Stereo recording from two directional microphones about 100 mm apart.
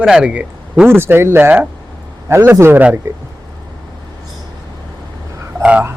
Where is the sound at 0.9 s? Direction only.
25° right (ahead or behind).